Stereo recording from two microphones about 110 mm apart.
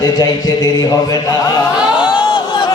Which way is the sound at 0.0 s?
40° left (ahead or behind).